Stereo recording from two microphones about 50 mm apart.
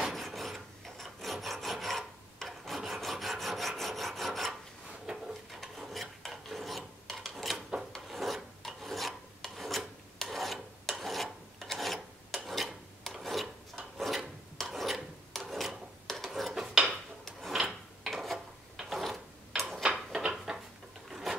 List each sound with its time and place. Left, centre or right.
0.0 s filing: centre
2.6 s rub: centre
5.5 s filing: centre
7.1 s a sound: centre
7.9 s filing: centre
11.6 s rub: centre
15.5 s filing: centre
16.3 s cutlery: centre
17.5 s filing: centre
18.9 s a sound: centre
19.8 s a sound: centre
21.1 s wood: centre